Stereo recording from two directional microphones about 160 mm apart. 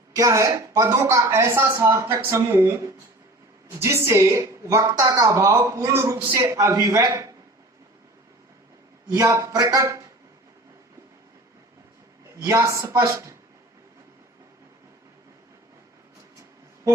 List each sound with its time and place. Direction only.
0.1 s a woman's voice: 20° right (ahead or behind)
9.0 s a woman's voice: 20° right (ahead or behind)
12.4 s a woman's voice: 20° right (ahead or behind)